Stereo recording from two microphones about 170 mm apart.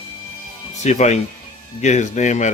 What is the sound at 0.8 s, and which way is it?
Speech, 40° left (ahead or behind).